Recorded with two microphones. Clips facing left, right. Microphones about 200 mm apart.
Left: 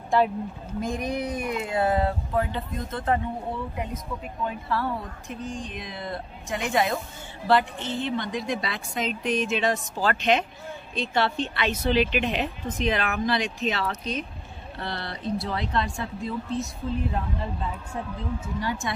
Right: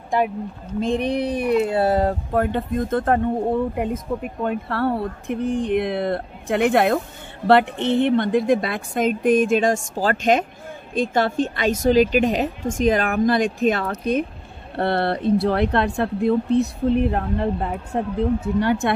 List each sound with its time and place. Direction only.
0.7 s speech: 30° right (ahead or behind)
2.4 s a woman's voice: 55° right (ahead or behind)